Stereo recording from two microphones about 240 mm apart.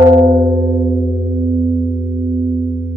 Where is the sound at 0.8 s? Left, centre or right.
Centre.